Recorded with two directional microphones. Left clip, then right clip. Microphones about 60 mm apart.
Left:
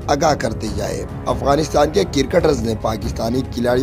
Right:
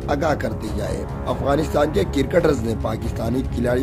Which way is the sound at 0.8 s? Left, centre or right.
Left.